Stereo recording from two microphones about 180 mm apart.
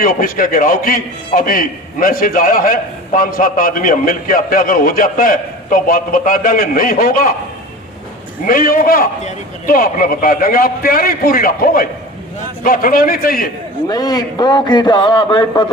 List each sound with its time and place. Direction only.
0.0 s a man's voice: 50° left (ahead or behind)
8.4 s a man's voice: 50° left (ahead or behind)
13.8 s a man's voice: 20° left (ahead or behind)